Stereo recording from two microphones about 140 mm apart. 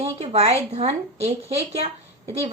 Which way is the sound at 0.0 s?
45° right (ahead or behind).